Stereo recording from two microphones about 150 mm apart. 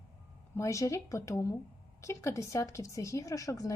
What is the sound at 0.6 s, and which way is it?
Speech, 20° left (ahead or behind).